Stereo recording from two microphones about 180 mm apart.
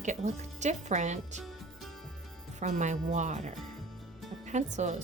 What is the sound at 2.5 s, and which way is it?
Speech, 40° right (ahead or behind).